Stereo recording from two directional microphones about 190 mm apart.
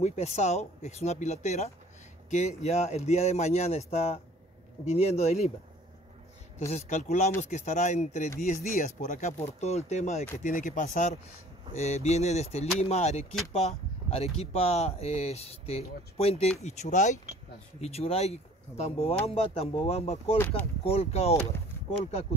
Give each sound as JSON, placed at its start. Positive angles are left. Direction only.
{"t": 0.0, "sound": "speech", "side_deg": 35}
{"t": 6.7, "sound": "speech", "side_deg": 40}
{"t": 20.3, "sound": "speech", "side_deg": 10}
{"t": 20.8, "sound": "speech", "side_deg": 30}